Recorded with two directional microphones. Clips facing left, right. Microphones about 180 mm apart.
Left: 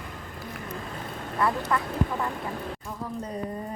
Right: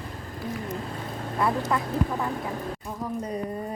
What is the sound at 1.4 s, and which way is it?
Speech, 20° right (ahead or behind).